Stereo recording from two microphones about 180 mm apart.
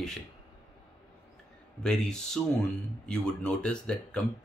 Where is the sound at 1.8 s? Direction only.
5° left (ahead or behind).